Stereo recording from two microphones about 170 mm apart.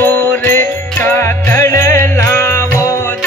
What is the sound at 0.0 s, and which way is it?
Jingle bell, 10° left (ahead or behind).